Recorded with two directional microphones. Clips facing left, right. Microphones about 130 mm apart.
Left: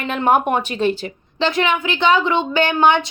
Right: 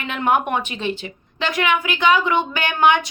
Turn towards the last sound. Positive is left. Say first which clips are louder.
# left 2 dB
turn(degrees=30)  # may be behind; listen again after turning